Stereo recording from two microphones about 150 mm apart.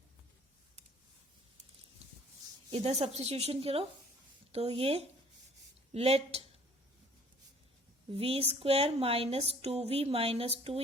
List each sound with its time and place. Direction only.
2.0 s a sound: 45° right (ahead or behind)
2.7 s a woman's voice: 45° right (ahead or behind)
8.1 s speech: 40° right (ahead or behind)